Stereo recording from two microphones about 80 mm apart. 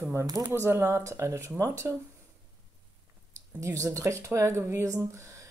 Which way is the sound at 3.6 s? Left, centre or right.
Right.